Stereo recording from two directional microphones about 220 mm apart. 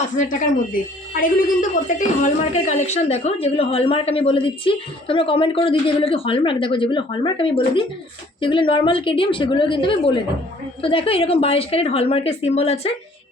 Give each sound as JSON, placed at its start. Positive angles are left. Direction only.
{"t": 0.2, "sound": "a woman's voice", "side_deg": 35}